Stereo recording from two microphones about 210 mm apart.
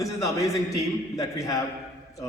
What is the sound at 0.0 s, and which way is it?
A man's voice, 15° left (ahead or behind).